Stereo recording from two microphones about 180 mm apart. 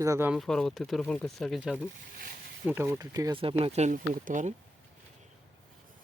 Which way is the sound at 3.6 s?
35° right (ahead or behind).